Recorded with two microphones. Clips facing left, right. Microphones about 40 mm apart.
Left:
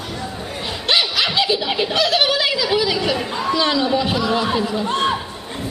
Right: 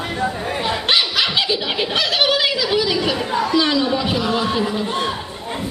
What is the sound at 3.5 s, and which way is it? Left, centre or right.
A man's voice, centre.